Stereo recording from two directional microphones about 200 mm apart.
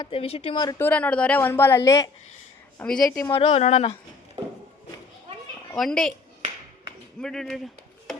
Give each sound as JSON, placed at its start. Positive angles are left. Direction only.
{"t": 0.0, "sound": "speech", "side_deg": 30}
{"t": 0.9, "sound": "speech", "side_deg": 5}
{"t": 2.7, "sound": "speech", "side_deg": 5}
{"t": 3.2, "sound": "a woman's voice", "side_deg": 30}
{"t": 5.7, "sound": "speech", "side_deg": 0}
{"t": 7.2, "sound": "speech", "side_deg": 5}